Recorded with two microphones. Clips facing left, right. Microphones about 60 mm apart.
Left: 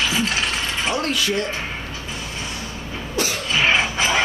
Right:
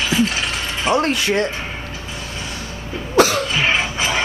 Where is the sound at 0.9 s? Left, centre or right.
Right.